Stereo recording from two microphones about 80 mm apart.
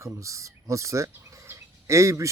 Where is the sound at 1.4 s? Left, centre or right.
Right.